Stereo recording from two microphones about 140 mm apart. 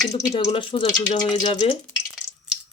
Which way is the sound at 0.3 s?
40° left (ahead or behind).